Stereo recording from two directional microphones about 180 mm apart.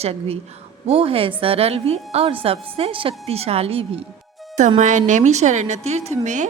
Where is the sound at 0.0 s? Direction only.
35° right (ahead or behind).